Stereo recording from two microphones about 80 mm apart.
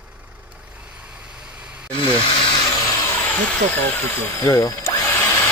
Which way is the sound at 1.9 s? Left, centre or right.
Left.